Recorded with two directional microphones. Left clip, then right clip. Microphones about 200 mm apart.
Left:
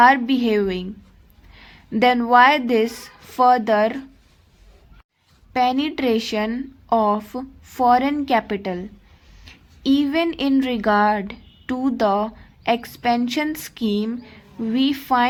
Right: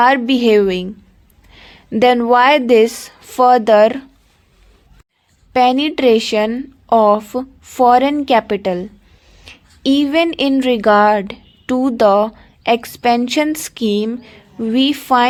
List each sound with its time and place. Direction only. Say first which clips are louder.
0.0 s a woman's voice: right 3 dB; 30° right (ahead or behind)
5.5 s a woman's voice: right 7 dB; 30° right (ahead or behind)